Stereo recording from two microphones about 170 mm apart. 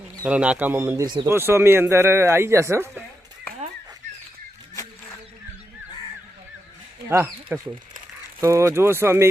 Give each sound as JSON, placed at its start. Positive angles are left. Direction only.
{"t": 0.3, "sound": "speech", "side_deg": -5}
{"t": 1.0, "sound": "speech", "side_deg": -25}
{"t": 7.5, "sound": "speech", "side_deg": -10}